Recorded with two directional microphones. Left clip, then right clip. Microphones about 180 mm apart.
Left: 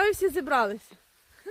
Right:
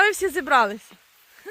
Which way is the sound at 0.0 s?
15° right (ahead or behind).